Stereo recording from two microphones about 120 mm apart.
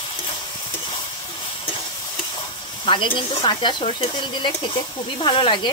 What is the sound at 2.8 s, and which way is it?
Speech, 45° left (ahead or behind).